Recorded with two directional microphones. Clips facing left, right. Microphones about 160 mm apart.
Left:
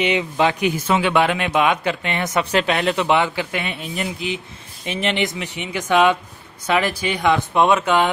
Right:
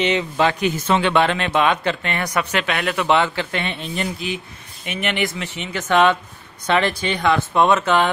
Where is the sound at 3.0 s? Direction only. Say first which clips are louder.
Even; 15° left (ahead or behind).